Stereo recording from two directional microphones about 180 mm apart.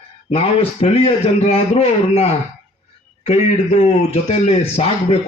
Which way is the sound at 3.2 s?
35° left (ahead or behind).